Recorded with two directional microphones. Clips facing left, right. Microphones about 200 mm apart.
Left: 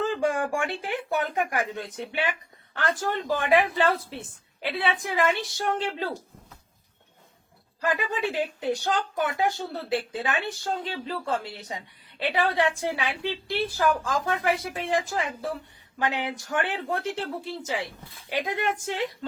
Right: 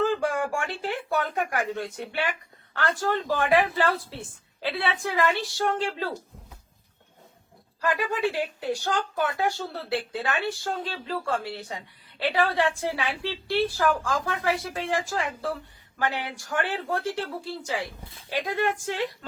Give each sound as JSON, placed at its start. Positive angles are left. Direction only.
{"t": 0.2, "sound": "speech", "side_deg": 15}
{"t": 7.9, "sound": "speech", "side_deg": 20}